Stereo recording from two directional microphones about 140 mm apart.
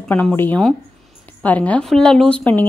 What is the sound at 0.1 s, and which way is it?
Speech, 15° left (ahead or behind).